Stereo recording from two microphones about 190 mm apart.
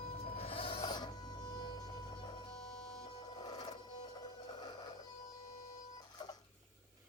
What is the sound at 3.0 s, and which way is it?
Printer, 25° left (ahead or behind).